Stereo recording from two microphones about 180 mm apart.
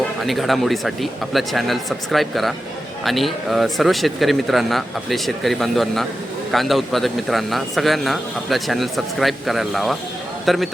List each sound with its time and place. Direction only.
0.2 s a man's voice: centre (ahead or behind)